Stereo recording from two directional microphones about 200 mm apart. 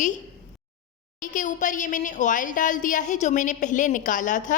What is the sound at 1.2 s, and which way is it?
A woman's voice, 40° left (ahead or behind).